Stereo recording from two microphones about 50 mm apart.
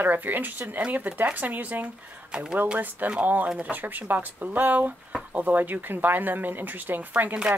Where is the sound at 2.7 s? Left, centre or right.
Right.